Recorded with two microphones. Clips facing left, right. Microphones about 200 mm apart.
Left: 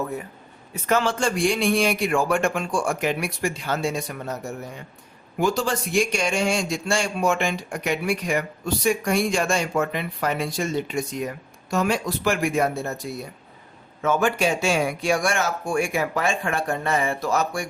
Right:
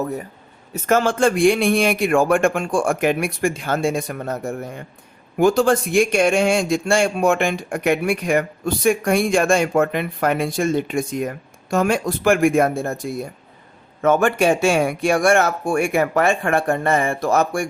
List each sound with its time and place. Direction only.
0.7 s speech: 45° right (ahead or behind)